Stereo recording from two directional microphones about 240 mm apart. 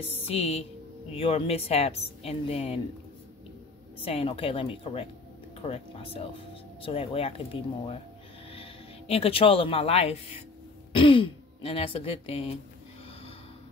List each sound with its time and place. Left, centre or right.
0.1 s speech: left
4.0 s speech: left